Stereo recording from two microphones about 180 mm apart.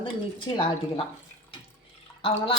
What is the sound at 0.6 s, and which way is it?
Speech, 25° left (ahead or behind).